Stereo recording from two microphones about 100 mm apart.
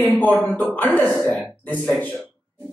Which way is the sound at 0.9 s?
10° left (ahead or behind).